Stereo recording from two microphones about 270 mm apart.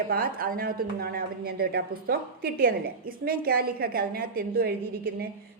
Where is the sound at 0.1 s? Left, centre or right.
Right.